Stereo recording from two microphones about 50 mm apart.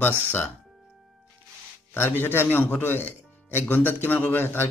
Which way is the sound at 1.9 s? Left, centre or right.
Left.